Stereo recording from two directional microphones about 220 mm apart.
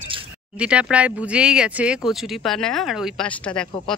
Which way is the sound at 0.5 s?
5° right (ahead or behind).